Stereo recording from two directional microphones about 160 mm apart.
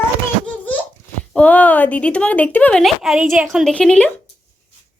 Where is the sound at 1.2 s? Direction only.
5° left (ahead or behind).